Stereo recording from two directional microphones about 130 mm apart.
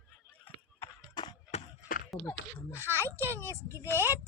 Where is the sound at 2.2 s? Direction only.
15° left (ahead or behind).